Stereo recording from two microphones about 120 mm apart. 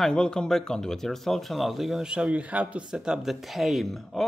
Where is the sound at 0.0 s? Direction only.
5° left (ahead or behind).